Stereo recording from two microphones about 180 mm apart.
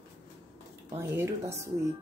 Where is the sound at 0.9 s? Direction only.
15° right (ahead or behind).